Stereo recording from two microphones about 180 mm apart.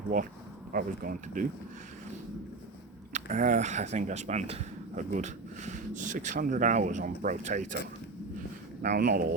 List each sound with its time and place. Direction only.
0.1 s speech: 45° right (ahead or behind)
3.1 s speech: 45° right (ahead or behind)
8.8 s speech: 50° right (ahead or behind)